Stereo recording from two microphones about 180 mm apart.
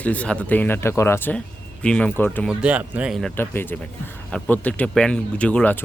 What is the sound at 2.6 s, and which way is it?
Speech, 10° right (ahead or behind).